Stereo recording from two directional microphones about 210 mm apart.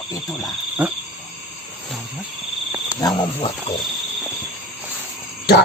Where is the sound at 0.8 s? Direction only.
5° right (ahead or behind).